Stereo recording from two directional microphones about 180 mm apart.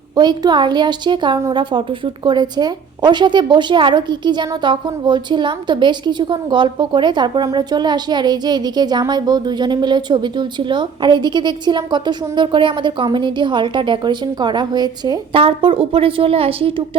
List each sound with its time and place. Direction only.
0.2 s a woman's voice: 25° right (ahead or behind)